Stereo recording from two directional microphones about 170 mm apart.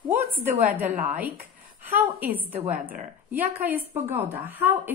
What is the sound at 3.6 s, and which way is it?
A woman's voice, 10° right (ahead or behind).